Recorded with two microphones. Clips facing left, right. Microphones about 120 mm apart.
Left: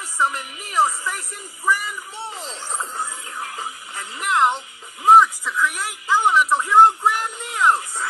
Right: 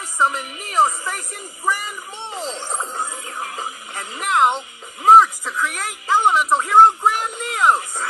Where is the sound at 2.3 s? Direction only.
20° right (ahead or behind).